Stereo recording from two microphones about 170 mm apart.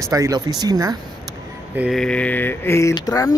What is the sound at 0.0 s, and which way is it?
Speech, 20° right (ahead or behind).